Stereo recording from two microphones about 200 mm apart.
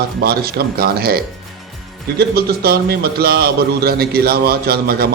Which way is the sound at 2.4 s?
50° right (ahead or behind).